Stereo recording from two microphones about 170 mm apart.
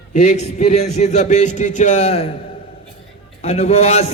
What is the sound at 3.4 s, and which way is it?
Speech, 40° left (ahead or behind).